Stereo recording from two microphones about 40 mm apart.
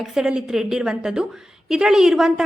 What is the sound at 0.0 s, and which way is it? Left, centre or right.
A woman's voice, centre.